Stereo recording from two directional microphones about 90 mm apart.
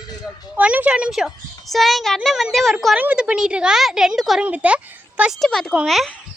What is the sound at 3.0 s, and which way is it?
A woman's voice, 15° right (ahead or behind).